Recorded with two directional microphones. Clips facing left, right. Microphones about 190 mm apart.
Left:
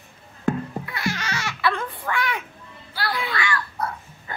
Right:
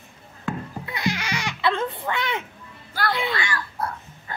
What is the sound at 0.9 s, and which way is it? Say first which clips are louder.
Baby cry: right 4 dB; 20° right (ahead or behind).